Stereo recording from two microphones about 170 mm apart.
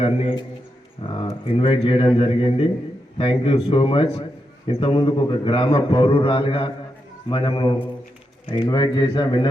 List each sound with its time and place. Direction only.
0.0 s a man's voice: 35° left (ahead or behind)